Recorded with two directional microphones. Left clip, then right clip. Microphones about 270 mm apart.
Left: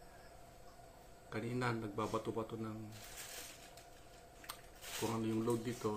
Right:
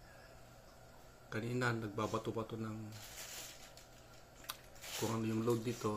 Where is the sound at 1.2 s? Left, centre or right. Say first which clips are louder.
Right 2 dB; centre.